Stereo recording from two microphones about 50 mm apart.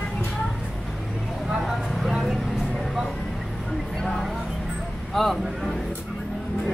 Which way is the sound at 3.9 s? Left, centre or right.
Centre.